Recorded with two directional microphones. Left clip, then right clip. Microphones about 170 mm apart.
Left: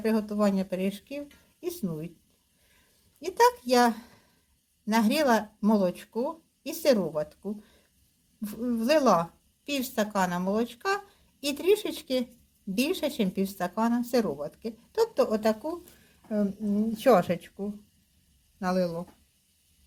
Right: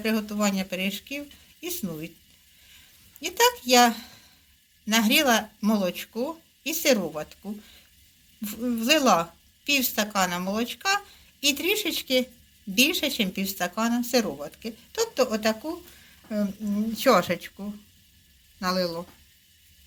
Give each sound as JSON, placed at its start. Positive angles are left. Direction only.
{"t": 0.0, "sound": "speech", "side_deg": 50}
{"t": 3.2, "sound": "speech", "side_deg": 50}
{"t": 8.7, "sound": "speech", "side_deg": 45}
{"t": 16.3, "sound": "a woman's voice", "side_deg": 40}
{"t": 18.6, "sound": "speech", "side_deg": 50}